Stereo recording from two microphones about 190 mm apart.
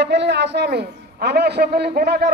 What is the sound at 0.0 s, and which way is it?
A man's voice, 65° right (ahead or behind).